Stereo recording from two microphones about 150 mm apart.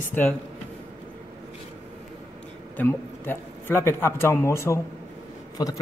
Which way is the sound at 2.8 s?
15° left (ahead or behind).